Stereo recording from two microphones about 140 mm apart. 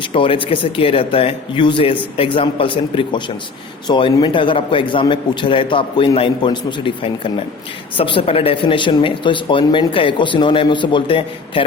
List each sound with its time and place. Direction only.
0.0 s speech: 40° left (ahead or behind)